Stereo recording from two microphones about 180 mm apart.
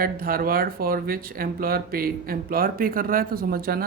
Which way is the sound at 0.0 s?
55° right (ahead or behind).